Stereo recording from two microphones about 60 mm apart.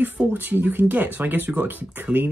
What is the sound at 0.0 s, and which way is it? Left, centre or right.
Speech, right.